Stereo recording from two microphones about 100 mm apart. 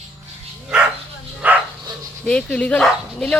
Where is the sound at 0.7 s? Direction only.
5° right (ahead or behind).